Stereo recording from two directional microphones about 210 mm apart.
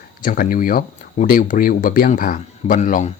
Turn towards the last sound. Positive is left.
turn(degrees=35)  # may be behind; listen again after turning